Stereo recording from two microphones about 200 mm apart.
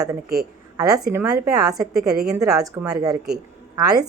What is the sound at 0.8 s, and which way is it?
A woman's voice, 15° right (ahead or behind).